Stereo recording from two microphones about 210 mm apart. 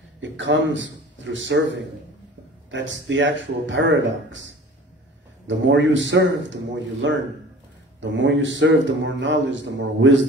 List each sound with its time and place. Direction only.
0.2 s a man's voice: 60° right (ahead or behind)